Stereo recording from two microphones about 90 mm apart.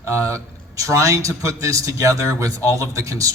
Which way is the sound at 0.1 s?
35° right (ahead or behind).